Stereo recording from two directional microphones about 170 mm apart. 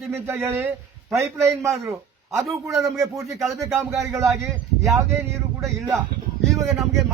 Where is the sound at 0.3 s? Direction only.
15° right (ahead or behind).